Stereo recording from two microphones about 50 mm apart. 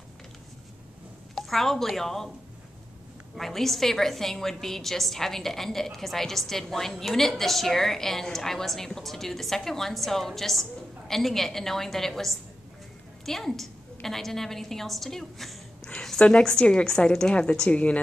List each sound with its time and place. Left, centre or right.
1.3 s a woman's voice: centre
3.3 s a woman's voice: centre
15.8 s a sound: centre
16.3 s a woman's voice: centre